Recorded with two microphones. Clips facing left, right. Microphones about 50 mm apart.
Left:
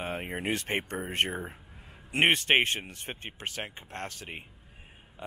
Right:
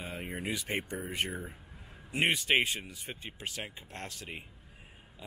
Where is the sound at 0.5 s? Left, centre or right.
Left.